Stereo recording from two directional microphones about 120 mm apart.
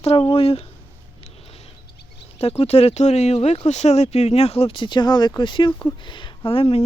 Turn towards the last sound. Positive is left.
turn(degrees=50)  # may be behind; listen again after turning